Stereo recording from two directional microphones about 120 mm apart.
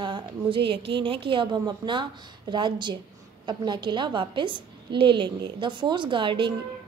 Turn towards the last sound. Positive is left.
turn(degrees=-45)  # may be behind; listen again after turning